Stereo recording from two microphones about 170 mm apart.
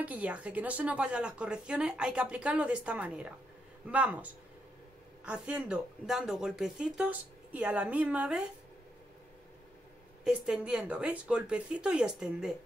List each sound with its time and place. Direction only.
0.0 s speech: 10° right (ahead or behind)
10.2 s speech: 5° right (ahead or behind)